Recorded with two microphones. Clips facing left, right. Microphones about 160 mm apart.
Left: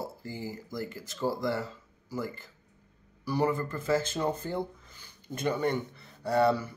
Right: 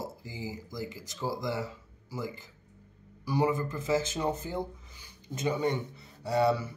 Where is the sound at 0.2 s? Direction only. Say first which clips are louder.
Left 2 dB; 55° left (ahead or behind).